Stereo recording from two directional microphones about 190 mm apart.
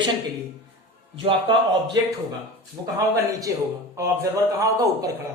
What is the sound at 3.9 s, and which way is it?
A man's voice, 15° right (ahead or behind).